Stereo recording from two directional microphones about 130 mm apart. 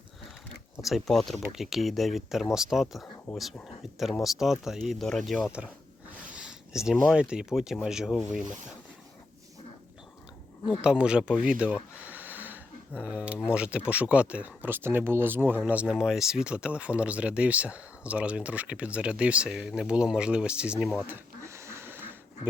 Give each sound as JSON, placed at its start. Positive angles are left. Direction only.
{"t": 0.8, "sound": "speech", "side_deg": 0}
{"t": 3.3, "sound": "speech", "side_deg": 45}
{"t": 3.9, "sound": "speech", "side_deg": 0}
{"t": 6.3, "sound": "a sound", "side_deg": -5}
{"t": 7.1, "sound": "speech", "side_deg": -5}
{"t": 10.8, "sound": "speech", "side_deg": -5}
{"t": 21.4, "sound": "a sound", "side_deg": -20}